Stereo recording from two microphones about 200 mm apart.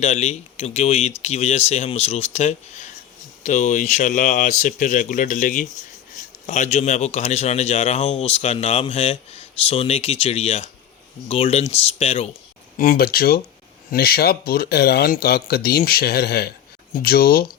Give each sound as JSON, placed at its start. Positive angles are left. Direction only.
{"t": 0.0, "sound": "a man's voice", "side_deg": 35}
{"t": 12.7, "sound": "speech", "side_deg": 45}